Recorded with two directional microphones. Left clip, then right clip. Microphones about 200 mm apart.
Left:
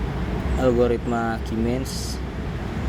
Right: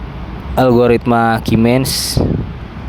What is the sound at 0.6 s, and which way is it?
Speech, 50° right (ahead or behind).